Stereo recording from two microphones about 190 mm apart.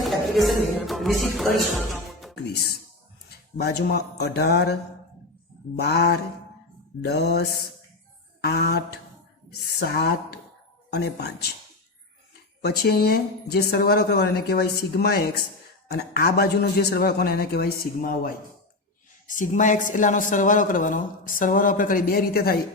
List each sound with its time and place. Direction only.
0.0 s speech: centre (ahead or behind)
2.3 s a woman's voice: 60° left (ahead or behind)
8.4 s mantra: 60° left (ahead or behind)
9.5 s a woman's voice: 60° left (ahead or behind)
12.6 s a woman's voice: 55° left (ahead or behind)
19.3 s a woman's voice: 40° left (ahead or behind)